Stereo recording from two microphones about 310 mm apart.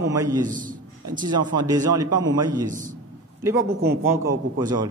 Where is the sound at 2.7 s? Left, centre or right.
Right.